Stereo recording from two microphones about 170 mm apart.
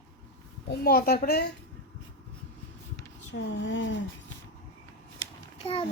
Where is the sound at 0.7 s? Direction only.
60° left (ahead or behind).